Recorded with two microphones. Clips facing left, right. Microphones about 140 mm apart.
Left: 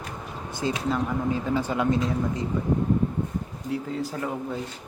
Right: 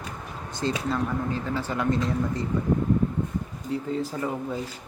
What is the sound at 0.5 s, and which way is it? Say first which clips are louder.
Speech: left 1 dB; 10° left (ahead or behind).